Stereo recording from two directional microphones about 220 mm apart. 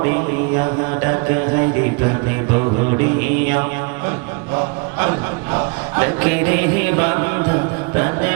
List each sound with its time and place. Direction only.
0.6 s mantra: 20° right (ahead or behind)
3.2 s mantra: 15° right (ahead or behind)
5.5 s music: 15° right (ahead or behind)